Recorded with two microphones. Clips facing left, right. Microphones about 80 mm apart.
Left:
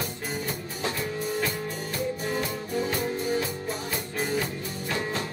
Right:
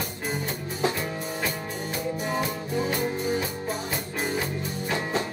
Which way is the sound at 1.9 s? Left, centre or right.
Centre.